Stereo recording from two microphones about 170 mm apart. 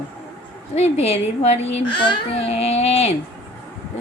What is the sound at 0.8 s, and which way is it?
A child's voice, 40° left (ahead or behind).